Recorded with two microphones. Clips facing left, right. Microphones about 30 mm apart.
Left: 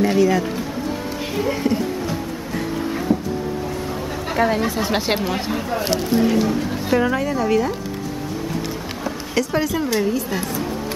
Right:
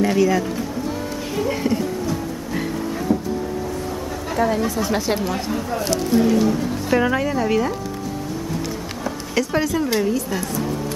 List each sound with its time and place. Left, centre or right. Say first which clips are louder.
0.0 s a woman's voice: left 1 dB; centre
3.1 s a sound: even; centre
4.3 s speech: left 1 dB; left; by 7.0 s centre
7.0 s a woman's voice: right 1 dB; centre
9.0 s a sound: even; centre
9.9 s speech: even; centre